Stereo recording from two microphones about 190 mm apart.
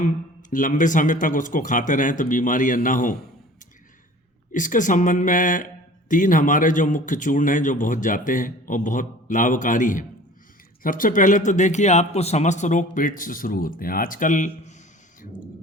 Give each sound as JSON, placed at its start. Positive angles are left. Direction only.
{"t": 0.5, "sound": "a man's voice", "side_deg": 45}
{"t": 4.5, "sound": "a man's voice", "side_deg": 45}